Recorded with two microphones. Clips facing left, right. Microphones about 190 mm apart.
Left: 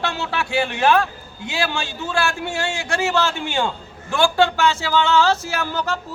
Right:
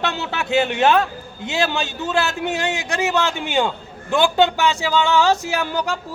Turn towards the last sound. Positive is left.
turn(degrees=-15)  # may be behind; listen again after turning